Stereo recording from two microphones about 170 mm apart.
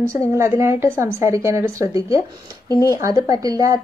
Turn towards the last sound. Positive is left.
turn(degrees=-20)  # may be behind; listen again after turning